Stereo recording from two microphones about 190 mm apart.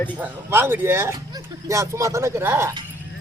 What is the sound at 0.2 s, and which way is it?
Speech, 10° right (ahead or behind).